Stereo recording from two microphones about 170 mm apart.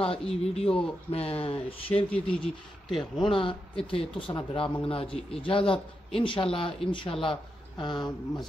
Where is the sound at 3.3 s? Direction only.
30° left (ahead or behind).